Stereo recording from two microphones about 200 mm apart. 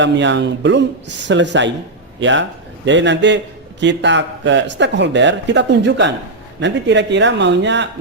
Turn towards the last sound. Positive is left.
turn(degrees=-60)  # may be behind; listen again after turning